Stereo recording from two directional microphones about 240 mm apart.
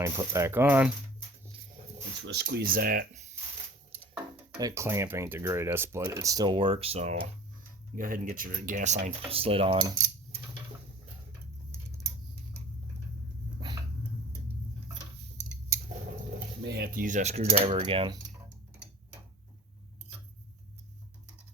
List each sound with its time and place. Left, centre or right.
0.0 s speech: centre
2.2 s speech: right
4.5 s speech: centre
16.6 s speech: right